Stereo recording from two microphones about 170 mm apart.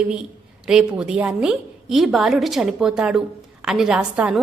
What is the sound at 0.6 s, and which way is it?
A woman's voice, 5° right (ahead or behind).